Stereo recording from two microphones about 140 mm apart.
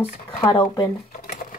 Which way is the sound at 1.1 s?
80° left.